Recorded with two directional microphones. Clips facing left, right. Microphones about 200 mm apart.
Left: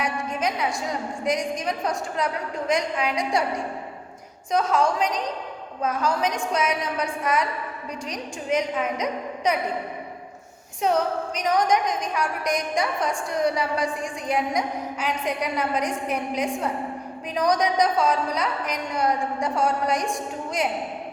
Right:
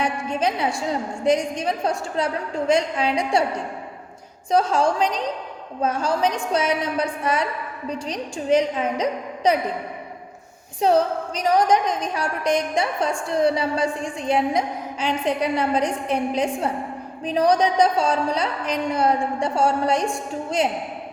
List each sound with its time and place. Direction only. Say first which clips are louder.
0.0 s a woman's voice: right 3 dB; 30° right (ahead or behind)
4.5 s a woman's voice: right 3 dB; 30° right (ahead or behind)
10.8 s a woman's voice: right 4 dB; 30° right (ahead or behind)